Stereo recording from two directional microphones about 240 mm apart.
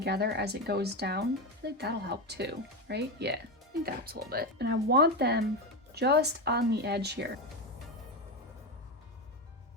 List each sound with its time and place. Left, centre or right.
0.0 s speech: right